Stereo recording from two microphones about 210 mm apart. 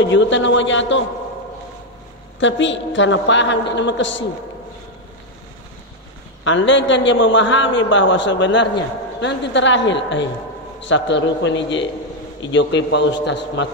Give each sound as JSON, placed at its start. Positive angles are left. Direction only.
{"t": 0.1, "sound": "a man's voice", "side_deg": 60}
{"t": 2.4, "sound": "a man's voice", "side_deg": 60}
{"t": 6.4, "sound": "a man's voice", "side_deg": 60}